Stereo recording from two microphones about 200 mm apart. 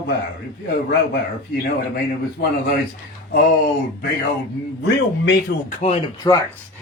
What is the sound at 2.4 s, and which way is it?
Speech, 50° left (ahead or behind).